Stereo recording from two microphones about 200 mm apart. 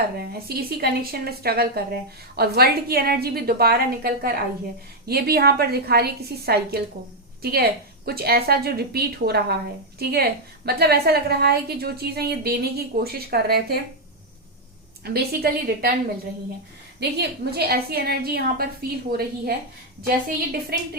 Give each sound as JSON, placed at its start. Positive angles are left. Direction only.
{"t": 0.2, "sound": "a woman's voice", "side_deg": -50}
{"t": 15.0, "sound": "a woman's voice", "side_deg": -50}
{"t": 17.0, "sound": "a woman's voice", "side_deg": -55}